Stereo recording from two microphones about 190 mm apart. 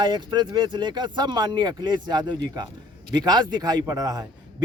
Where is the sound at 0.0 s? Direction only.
25° right (ahead or behind).